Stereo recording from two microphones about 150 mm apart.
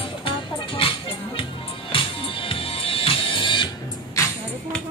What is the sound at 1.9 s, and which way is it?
Music, 35° left (ahead or behind).